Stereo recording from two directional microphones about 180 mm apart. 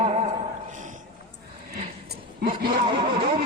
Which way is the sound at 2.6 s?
25° right (ahead or behind).